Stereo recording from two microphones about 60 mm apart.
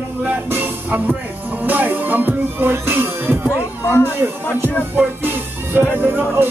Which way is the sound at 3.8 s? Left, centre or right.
Left.